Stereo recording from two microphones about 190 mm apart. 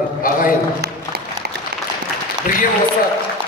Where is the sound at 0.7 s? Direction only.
55° right (ahead or behind).